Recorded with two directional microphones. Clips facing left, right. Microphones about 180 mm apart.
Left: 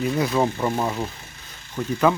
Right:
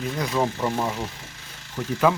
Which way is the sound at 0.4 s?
10° left (ahead or behind).